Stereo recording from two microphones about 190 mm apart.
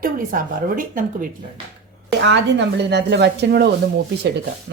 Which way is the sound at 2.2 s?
65° right (ahead or behind).